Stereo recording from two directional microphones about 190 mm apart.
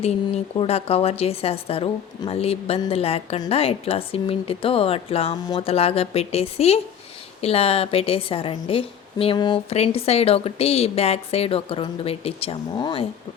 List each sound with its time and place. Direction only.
0.5 s a woman's voice: 30° left (ahead or behind)